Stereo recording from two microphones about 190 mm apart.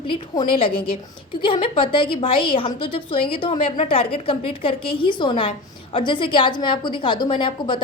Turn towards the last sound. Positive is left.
turn(degrees=25)  # may be behind; listen again after turning